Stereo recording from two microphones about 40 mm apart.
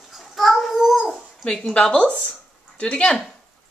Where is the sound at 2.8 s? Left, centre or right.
Left.